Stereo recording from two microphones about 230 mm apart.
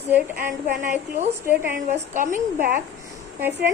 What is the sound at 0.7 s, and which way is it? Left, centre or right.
A woman's voice, right.